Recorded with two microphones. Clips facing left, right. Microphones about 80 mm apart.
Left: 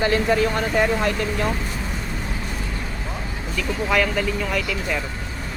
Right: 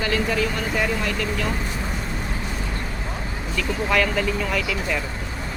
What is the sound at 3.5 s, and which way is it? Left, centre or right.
Speech, centre.